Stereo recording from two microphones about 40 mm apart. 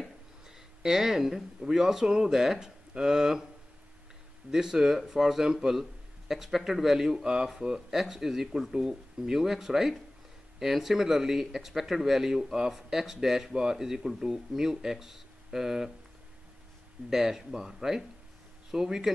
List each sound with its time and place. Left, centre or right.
0.8 s speech: centre
4.5 s speech: centre
17.1 s speech: centre